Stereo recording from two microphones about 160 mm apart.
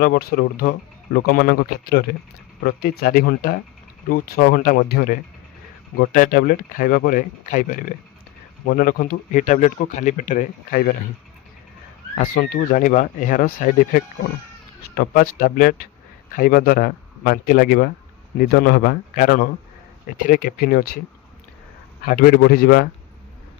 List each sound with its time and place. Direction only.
0.0 s speech: 65° left (ahead or behind)
6.0 s speech: 60° left (ahead or behind)
12.1 s speech: 65° left (ahead or behind)
22.0 s speech: 60° left (ahead or behind)